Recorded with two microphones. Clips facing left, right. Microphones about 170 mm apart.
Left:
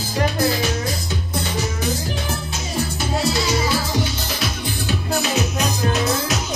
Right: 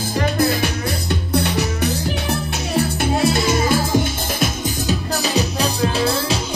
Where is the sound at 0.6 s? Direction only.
60° right (ahead or behind).